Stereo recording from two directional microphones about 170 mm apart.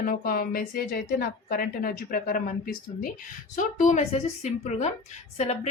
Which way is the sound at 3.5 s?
45° left (ahead or behind).